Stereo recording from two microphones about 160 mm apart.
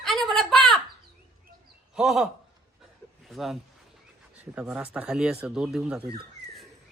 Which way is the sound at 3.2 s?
Centre (ahead or behind).